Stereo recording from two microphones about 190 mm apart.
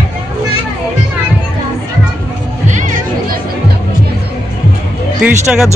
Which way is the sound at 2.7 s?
40° right (ahead or behind).